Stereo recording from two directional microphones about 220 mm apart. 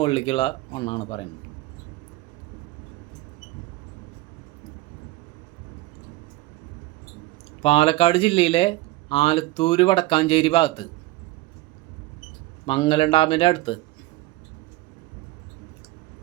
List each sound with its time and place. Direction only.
0.0 s speech: 25° left (ahead or behind)
7.6 s speech: 25° left (ahead or behind)
12.6 s speech: 25° left (ahead or behind)